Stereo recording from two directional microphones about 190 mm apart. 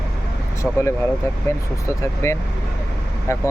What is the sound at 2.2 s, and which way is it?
Speech, 15° left (ahead or behind).